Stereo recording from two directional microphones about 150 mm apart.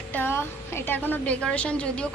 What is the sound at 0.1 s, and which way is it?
A woman's voice, 15° left (ahead or behind).